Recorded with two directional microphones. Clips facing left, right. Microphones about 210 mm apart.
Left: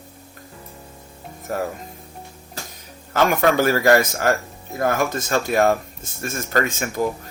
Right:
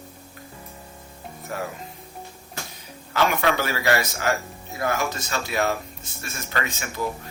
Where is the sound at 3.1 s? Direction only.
45° left (ahead or behind).